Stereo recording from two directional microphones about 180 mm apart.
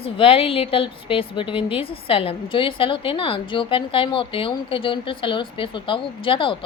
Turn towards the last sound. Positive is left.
turn(degrees=30)  # may be behind; listen again after turning